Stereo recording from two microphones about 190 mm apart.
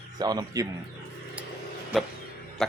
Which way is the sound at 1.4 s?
10° right (ahead or behind).